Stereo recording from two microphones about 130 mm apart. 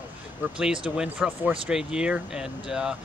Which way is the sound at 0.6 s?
5° right (ahead or behind).